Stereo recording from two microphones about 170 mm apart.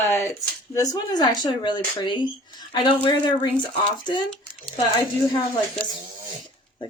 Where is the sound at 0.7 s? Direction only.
20° left (ahead or behind).